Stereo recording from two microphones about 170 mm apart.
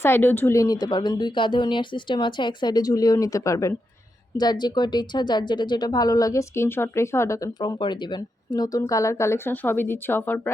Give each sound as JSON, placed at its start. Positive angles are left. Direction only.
{"t": 0.0, "sound": "a woman's voice", "side_deg": 10}